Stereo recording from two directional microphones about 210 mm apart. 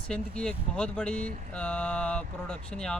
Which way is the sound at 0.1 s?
5° left (ahead or behind).